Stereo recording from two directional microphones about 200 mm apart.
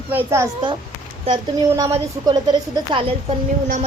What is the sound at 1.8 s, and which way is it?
Speech, 20° right (ahead or behind).